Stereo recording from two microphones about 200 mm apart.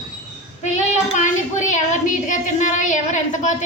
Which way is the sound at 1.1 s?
40° left (ahead or behind).